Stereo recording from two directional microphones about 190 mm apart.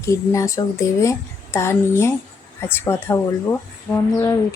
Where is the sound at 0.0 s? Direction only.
15° left (ahead or behind).